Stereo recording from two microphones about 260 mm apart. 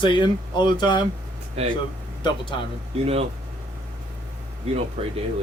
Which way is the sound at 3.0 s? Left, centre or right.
Right.